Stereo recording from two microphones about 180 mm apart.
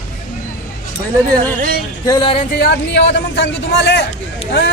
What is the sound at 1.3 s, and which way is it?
Speech, 55° right (ahead or behind).